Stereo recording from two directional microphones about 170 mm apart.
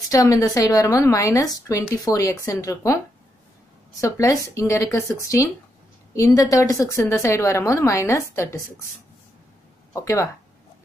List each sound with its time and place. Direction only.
0.1 s a woman's voice: 20° left (ahead or behind)
4.0 s a woman's voice: 20° left (ahead or behind)